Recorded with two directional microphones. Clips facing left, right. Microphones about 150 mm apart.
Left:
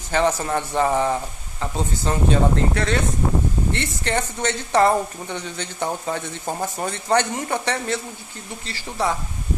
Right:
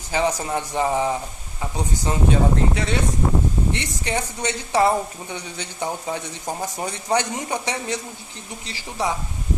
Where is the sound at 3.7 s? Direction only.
15° right (ahead or behind).